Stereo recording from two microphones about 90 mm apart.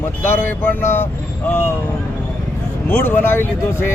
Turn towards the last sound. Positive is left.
turn(degrees=25)  # may be behind; listen again after turning